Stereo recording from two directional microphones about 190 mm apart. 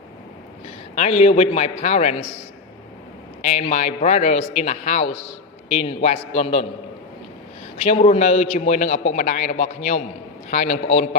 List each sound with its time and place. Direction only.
0.9 s a man's voice: 35° left (ahead or behind)
3.4 s a man's voice: 35° left (ahead or behind)
7.8 s a man's voice: 35° left (ahead or behind)